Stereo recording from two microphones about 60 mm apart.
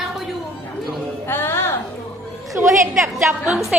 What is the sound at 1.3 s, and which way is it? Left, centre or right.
Speech, left.